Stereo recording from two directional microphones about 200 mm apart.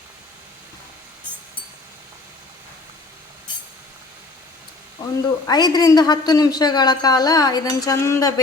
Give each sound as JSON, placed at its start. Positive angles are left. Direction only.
{"t": 5.0, "sound": "a woman's voice", "side_deg": 20}